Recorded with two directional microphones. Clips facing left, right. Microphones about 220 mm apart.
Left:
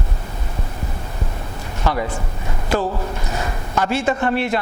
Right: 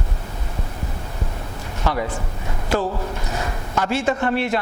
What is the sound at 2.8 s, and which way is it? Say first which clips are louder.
A man's voice: left 1 dB; 25° left (ahead or behind).